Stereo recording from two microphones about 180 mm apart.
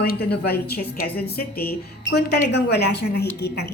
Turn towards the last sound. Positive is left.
turn(degrees=65)  # may be behind; listen again after turning